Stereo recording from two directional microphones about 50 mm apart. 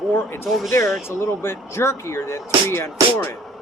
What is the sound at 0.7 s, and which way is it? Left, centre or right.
Speech, left.